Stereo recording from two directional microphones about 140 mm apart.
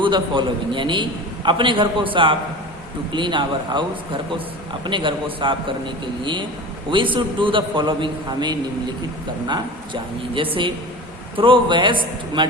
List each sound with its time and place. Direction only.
0.0 s a man's voice: 35° right (ahead or behind)